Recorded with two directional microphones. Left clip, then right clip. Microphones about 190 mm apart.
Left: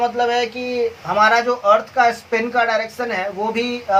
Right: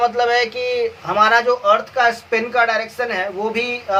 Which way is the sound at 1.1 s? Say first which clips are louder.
Right 1 dB; 30° right (ahead or behind).